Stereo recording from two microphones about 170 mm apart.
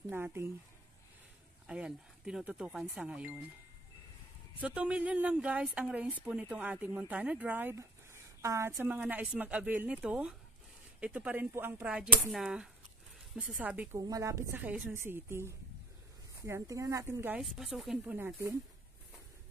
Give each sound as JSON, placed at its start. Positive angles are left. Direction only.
{"t": 0.1, "sound": "speech", "side_deg": -15}
{"t": 1.7, "sound": "speech", "side_deg": -5}
{"t": 4.6, "sound": "speech", "side_deg": -5}
{"t": 13.9, "sound": "speech", "side_deg": -20}